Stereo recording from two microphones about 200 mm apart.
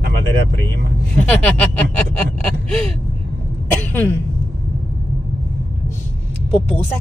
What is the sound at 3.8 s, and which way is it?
Speech, 10° left (ahead or behind).